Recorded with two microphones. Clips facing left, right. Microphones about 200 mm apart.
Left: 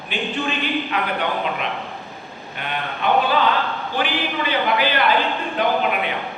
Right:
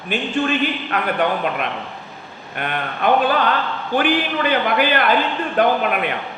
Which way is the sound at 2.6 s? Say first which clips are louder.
Right 3 dB; 50° right (ahead or behind).